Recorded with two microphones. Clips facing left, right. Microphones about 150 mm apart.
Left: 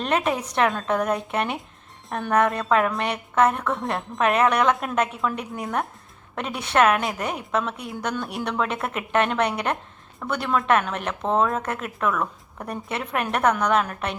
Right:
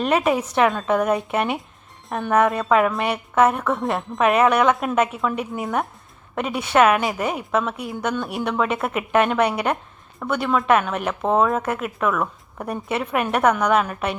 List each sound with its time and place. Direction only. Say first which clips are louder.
0.0 s a woman's voice: right 4 dB; 5° right (ahead or behind)